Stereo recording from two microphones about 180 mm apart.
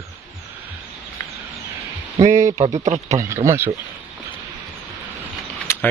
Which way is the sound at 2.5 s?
40° right (ahead or behind).